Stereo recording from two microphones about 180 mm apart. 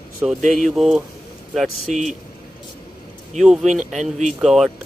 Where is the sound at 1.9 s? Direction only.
45° right (ahead or behind).